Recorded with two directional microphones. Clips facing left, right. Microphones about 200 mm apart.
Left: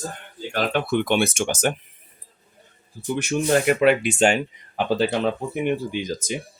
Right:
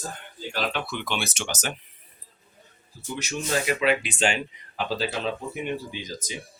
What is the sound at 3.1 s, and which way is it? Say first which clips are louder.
Speech: left 7 dB; 55° left (ahead or behind).